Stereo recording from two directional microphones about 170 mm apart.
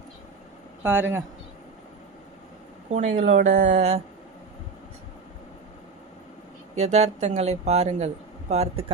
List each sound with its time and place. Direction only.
0.8 s speech: 10° right (ahead or behind)
2.9 s speech: 45° right (ahead or behind)
6.7 s speech: 40° right (ahead or behind)